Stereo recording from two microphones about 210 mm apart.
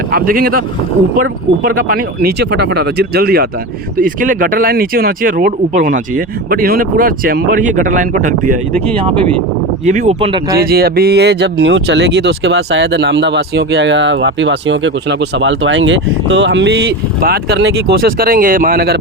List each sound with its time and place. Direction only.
0.1 s speech: 45° right (ahead or behind)
9.8 s speech: 35° right (ahead or behind)
10.6 s speech: 45° right (ahead or behind)